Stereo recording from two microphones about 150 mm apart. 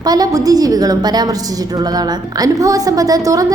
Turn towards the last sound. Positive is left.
turn(degrees=-25)  # may be behind; listen again after turning